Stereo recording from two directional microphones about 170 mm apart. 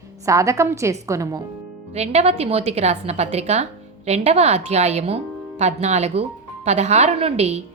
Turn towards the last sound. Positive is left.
turn(degrees=-40)  # may be behind; listen again after turning